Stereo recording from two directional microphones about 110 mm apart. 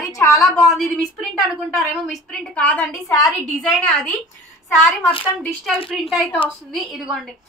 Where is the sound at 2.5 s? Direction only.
15° left (ahead or behind).